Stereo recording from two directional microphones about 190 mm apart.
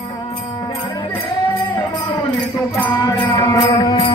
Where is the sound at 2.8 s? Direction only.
15° left (ahead or behind).